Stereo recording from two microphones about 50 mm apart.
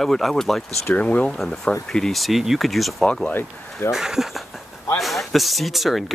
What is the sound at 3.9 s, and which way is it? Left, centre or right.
Speech, centre.